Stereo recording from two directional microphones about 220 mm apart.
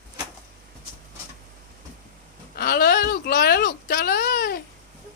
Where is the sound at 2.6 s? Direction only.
45° left (ahead or behind).